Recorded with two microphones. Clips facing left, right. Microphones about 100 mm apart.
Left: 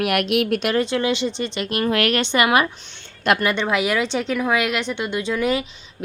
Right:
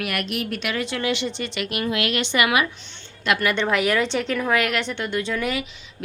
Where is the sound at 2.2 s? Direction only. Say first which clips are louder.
Left 3 dB; 30° left (ahead or behind).